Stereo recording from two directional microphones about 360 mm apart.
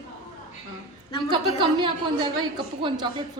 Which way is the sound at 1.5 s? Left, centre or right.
Centre.